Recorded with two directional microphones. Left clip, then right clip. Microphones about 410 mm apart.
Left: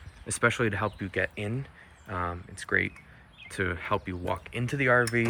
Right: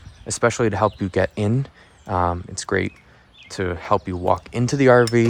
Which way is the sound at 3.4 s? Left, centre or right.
Centre.